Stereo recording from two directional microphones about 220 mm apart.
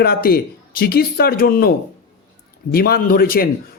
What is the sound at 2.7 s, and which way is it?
Speech, 45° left (ahead or behind).